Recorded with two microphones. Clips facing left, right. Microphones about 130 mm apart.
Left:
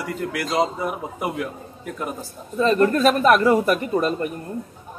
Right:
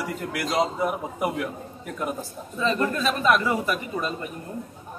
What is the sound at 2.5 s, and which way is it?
A man's voice, 50° left (ahead or behind).